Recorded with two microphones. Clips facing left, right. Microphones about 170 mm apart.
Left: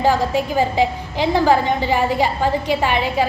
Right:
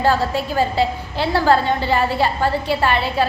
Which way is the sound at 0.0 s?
15° left (ahead or behind).